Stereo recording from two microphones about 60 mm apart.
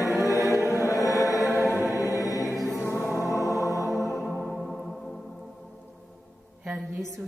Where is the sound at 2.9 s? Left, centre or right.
Left.